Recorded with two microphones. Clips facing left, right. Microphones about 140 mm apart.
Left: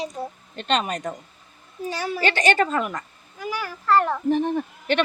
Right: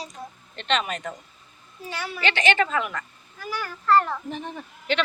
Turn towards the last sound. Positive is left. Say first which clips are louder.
# left 4 dB
turn(degrees=55)  # may be behind; listen again after turning